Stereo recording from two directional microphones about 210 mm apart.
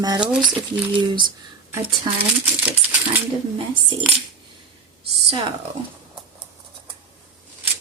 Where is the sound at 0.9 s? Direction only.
20° right (ahead or behind).